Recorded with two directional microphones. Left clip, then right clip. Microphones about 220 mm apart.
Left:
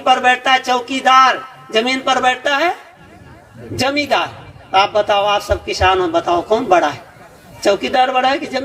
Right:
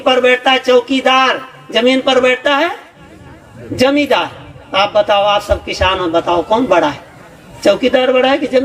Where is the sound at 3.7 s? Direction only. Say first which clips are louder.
Right 4 dB; 40° left (ahead or behind).